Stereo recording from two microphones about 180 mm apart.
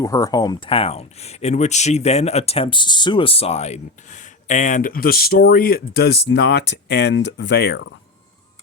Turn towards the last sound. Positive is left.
turn(degrees=70)  # may be behind; listen again after turning